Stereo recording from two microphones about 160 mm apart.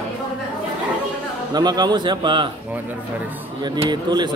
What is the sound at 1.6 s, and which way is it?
Speech, 25° right (ahead or behind).